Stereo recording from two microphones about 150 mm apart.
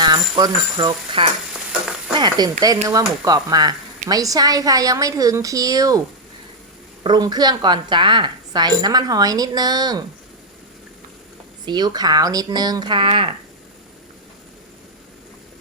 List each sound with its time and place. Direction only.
0.0 s speech: 25° right (ahead or behind)
7.0 s speech: 30° right (ahead or behind)
11.6 s speech: 30° right (ahead or behind)